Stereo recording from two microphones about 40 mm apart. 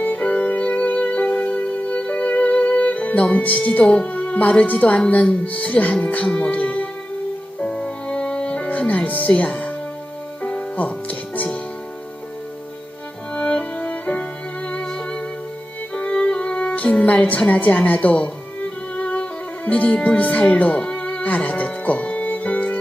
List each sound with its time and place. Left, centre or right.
0.2 s music: left
3.8 s a woman's voice: left
7.6 s music: left
13.3 s music: left
14.7 s music: left
17.5 s a woman's voice: left
18.6 s music: left